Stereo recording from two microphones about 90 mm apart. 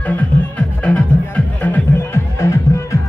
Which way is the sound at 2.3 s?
35° left (ahead or behind).